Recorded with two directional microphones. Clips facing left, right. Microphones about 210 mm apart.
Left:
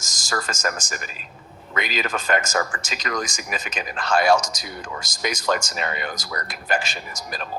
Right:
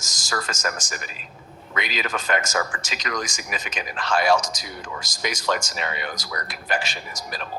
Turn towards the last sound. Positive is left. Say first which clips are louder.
# left 1 dB
turn(degrees=45)  # may be behind; listen again after turning